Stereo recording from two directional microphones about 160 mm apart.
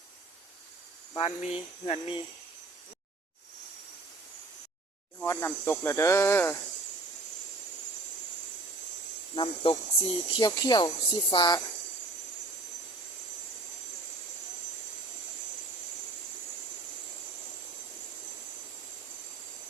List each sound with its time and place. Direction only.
1.2 s speech: 40° left (ahead or behind)
5.2 s speech: 15° left (ahead or behind)
9.3 s speech: 30° left (ahead or behind)